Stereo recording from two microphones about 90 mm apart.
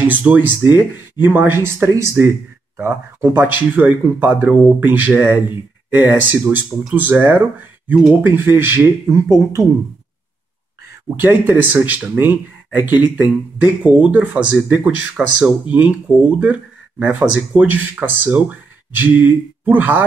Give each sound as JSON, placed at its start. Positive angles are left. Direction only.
{"t": 0.0, "sound": "speech", "side_deg": -20}
{"t": 11.1, "sound": "speech", "side_deg": -20}
{"t": 17.0, "sound": "speech", "side_deg": -15}